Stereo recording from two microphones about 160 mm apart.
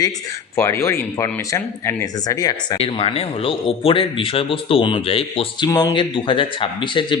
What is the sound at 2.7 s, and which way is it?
Speech, 35° left (ahead or behind).